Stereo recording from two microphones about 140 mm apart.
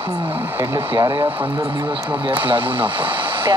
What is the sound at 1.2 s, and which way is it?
Speech, 40° right (ahead or behind).